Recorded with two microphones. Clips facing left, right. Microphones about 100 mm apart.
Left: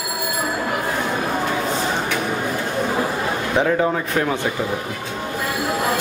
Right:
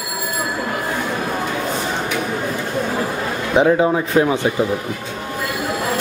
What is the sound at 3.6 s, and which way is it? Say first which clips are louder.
Speech: right 5 dB; 15° right (ahead or behind).